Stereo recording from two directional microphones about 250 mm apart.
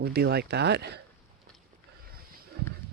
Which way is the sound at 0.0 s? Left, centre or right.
Right.